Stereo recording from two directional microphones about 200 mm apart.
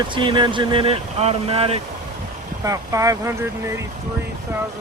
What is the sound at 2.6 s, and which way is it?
Speech, 15° right (ahead or behind).